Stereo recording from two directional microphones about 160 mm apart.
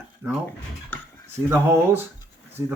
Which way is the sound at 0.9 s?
10° left (ahead or behind).